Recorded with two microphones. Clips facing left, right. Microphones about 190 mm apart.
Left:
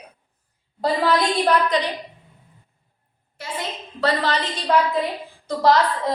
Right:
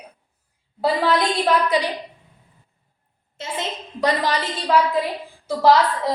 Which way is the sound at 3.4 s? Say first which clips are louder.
Right 2 dB; 20° right (ahead or behind).